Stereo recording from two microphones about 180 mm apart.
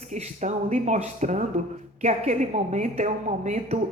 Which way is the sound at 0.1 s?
40° right (ahead or behind).